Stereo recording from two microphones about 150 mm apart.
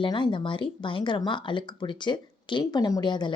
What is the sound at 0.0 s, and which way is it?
Speech, 35° left (ahead or behind).